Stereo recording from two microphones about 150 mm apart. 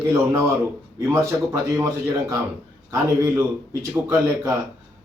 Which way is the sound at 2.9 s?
20° right (ahead or behind).